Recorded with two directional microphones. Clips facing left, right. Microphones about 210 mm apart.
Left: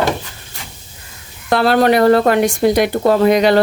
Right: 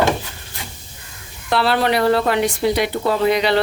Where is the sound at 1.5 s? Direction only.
45° left (ahead or behind).